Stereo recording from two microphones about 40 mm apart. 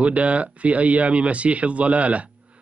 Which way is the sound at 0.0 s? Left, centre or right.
Right.